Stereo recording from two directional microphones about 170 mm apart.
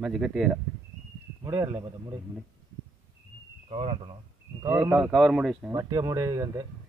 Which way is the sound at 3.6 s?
35° right (ahead or behind).